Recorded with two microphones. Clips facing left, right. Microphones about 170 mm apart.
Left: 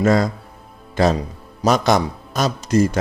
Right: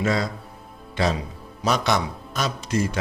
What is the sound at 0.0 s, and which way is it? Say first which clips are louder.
A man's voice: left 7 dB; 45° left (ahead or behind).